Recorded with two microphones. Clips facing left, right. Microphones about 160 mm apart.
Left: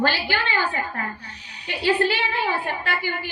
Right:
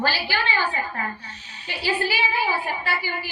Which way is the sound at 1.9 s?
60° left (ahead or behind).